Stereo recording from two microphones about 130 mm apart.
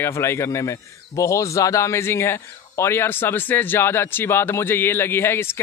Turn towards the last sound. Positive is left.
turn(degrees=20)  # may be behind; listen again after turning